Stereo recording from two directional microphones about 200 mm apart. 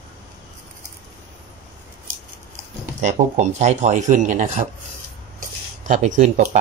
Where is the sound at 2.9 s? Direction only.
40° right (ahead or behind).